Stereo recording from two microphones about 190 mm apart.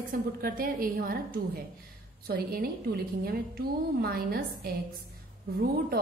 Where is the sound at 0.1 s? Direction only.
50° right (ahead or behind).